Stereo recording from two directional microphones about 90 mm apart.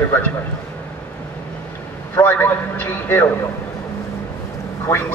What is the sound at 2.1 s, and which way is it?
A man's voice, 20° left (ahead or behind).